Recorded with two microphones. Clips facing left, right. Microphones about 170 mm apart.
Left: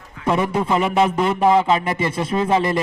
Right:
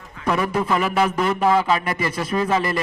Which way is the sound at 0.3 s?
25° left (ahead or behind).